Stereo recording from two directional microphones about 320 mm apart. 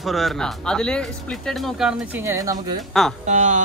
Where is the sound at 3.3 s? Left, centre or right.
Right.